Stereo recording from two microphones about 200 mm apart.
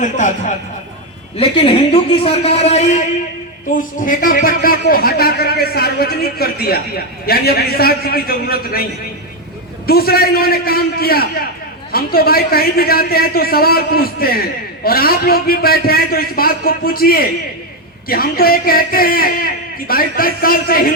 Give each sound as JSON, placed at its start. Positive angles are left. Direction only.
{"t": 0.0, "sound": "speech", "side_deg": 40}
{"t": 1.4, "sound": "a man's voice", "side_deg": 30}